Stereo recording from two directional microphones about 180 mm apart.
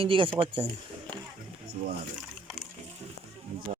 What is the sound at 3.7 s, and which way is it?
Music, 40° right (ahead or behind).